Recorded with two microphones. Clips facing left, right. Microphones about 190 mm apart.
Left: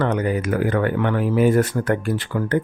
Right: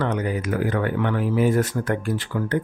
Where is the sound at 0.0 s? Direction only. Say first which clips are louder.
Left 3 dB; 55° left (ahead or behind).